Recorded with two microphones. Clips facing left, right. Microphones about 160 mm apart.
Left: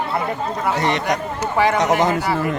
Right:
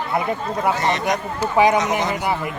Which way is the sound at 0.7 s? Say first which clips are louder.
Left 1 dB; 65° left (ahead or behind).